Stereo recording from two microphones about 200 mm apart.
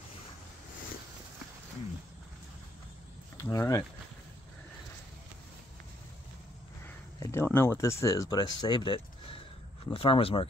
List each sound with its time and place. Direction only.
3.3 s speech: 15° left (ahead or behind)
7.2 s speech: 15° left (ahead or behind)